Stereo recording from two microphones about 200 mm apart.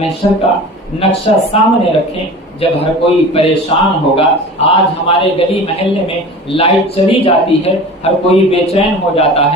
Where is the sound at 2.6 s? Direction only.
30° left (ahead or behind).